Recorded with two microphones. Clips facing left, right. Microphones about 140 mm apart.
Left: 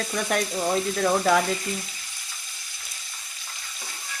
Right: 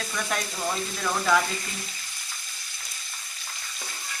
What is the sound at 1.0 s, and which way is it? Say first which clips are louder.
Speech: left 2 dB; 40° left (ahead or behind).